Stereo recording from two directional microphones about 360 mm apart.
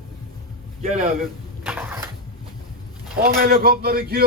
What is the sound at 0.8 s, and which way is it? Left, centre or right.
Speech, centre.